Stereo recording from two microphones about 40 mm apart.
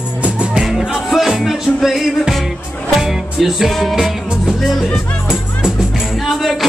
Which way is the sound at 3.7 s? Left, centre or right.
Centre.